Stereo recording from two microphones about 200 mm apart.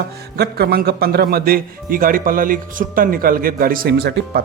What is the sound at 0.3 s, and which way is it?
Speech, 50° right (ahead or behind).